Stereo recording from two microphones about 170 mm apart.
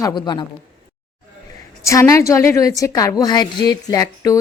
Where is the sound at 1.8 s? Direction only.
15° left (ahead or behind).